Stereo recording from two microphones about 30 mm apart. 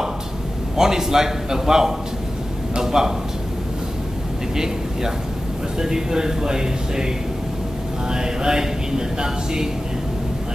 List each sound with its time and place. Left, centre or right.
0.7 s a man's voice: centre
5.8 s speech: right
8.1 s speech: right